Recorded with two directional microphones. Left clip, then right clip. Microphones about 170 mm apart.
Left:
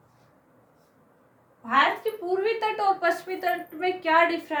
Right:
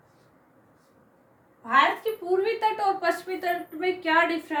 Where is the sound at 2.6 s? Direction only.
15° left (ahead or behind).